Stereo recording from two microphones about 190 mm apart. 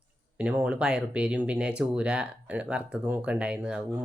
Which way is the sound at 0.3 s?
5° right (ahead or behind).